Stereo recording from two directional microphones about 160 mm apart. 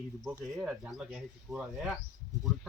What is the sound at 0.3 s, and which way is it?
Speech, centre (ahead or behind).